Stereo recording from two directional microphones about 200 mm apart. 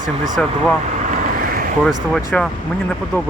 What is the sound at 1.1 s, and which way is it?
Vehicle, 45° right (ahead or behind).